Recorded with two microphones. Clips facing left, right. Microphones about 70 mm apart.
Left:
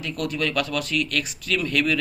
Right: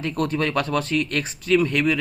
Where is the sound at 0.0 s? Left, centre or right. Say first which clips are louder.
Right 3 dB; right.